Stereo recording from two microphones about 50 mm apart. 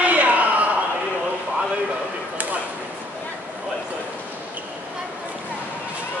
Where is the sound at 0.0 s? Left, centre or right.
Right.